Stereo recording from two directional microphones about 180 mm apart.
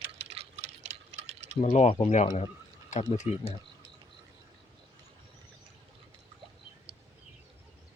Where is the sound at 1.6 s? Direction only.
40° left (ahead or behind).